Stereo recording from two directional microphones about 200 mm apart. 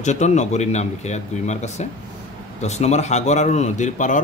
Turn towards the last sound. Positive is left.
turn(degrees=40)  # may be behind; listen again after turning